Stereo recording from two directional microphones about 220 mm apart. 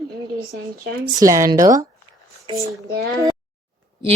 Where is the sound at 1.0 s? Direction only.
15° right (ahead or behind).